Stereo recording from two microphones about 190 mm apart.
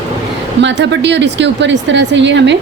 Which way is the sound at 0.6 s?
70° right (ahead or behind).